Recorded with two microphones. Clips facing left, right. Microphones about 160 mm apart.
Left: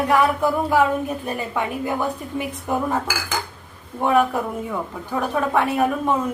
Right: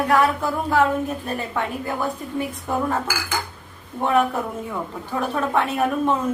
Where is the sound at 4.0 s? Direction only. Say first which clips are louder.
Left 1 dB; 5° left (ahead or behind).